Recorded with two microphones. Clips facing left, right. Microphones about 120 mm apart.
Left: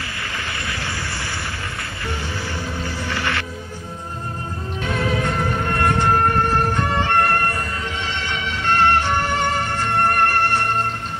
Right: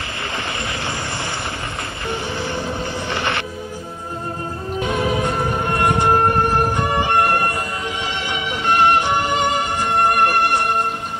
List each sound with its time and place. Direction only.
2.0 s music: 20° right (ahead or behind)
4.7 s music: 15° right (ahead or behind)